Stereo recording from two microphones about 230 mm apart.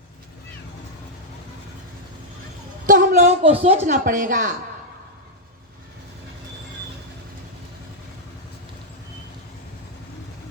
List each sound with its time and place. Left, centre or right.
2.8 s a woman's voice: right